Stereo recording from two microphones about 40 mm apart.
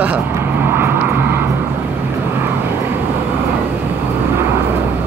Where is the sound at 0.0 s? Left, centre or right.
Right.